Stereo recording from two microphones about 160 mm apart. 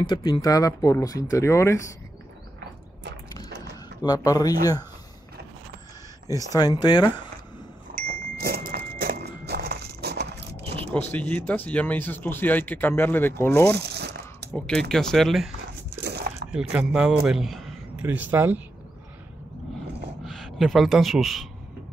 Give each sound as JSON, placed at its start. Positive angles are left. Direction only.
{"t": 0.0, "sound": "speech", "side_deg": 25}
{"t": 4.0, "sound": "speech", "side_deg": 25}
{"t": 6.2, "sound": "speech", "side_deg": 20}
{"t": 7.9, "sound": "a sound", "side_deg": -70}
{"t": 11.0, "sound": "speech", "side_deg": 10}
{"t": 13.7, "sound": "a sound", "side_deg": -90}
{"t": 14.5, "sound": "speech", "side_deg": 5}
{"t": 16.0, "sound": "a sound", "side_deg": -85}
{"t": 16.5, "sound": "a man's voice", "side_deg": -5}
{"t": 18.0, "sound": "speech", "side_deg": -10}
{"t": 20.2, "sound": "a man's voice", "side_deg": 0}